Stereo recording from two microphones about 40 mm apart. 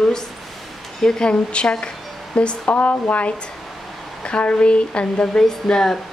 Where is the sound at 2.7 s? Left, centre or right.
Left; by 6.0 s centre.